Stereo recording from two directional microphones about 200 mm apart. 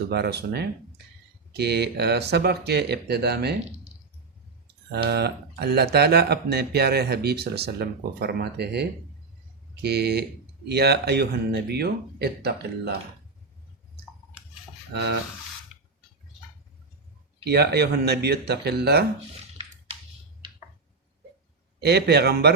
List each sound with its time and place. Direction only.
0.1 s speech: 55° right (ahead or behind)
4.9 s speech: 55° right (ahead or behind)
14.9 s speech: 55° right (ahead or behind)
17.4 s speech: 55° right (ahead or behind)
21.8 s speech: 55° right (ahead or behind)